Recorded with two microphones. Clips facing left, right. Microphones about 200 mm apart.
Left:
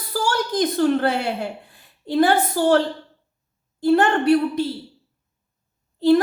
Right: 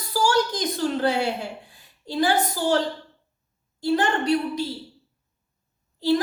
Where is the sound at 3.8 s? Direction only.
60° left (ahead or behind).